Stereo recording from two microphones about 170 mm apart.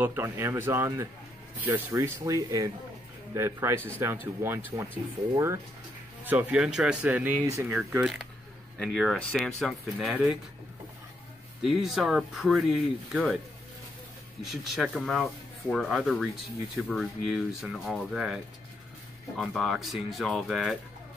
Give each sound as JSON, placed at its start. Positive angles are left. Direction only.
{"t": 0.0, "sound": "speech", "side_deg": -15}
{"t": 11.6, "sound": "speech", "side_deg": 0}
{"t": 14.4, "sound": "speech", "side_deg": 0}